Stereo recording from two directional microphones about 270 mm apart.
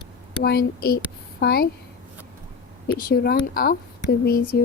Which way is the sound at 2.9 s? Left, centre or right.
Left.